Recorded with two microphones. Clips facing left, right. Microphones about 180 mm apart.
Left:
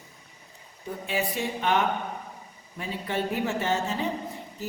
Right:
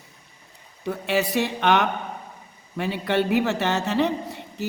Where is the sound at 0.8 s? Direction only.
75° right (ahead or behind).